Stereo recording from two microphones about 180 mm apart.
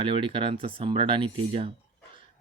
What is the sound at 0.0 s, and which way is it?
Speech, 30° right (ahead or behind).